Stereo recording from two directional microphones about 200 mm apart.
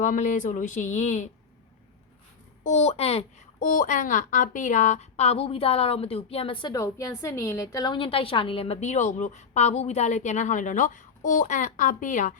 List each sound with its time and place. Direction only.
0.0 s a woman's voice: 40° left (ahead or behind)
2.6 s a woman's voice: 35° left (ahead or behind)